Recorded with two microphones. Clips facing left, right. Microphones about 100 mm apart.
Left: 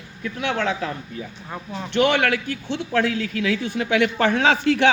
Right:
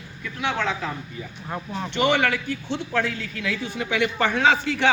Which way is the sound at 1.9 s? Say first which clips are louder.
Left 2 dB; 60° left (ahead or behind).